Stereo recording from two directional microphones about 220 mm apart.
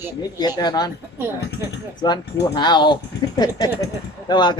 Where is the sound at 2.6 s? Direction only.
20° left (ahead or behind).